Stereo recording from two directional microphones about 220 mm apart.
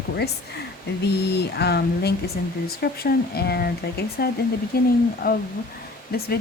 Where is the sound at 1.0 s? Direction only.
50° left (ahead or behind).